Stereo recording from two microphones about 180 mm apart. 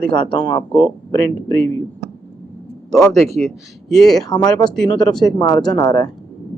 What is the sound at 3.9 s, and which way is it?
Speech, centre (ahead or behind).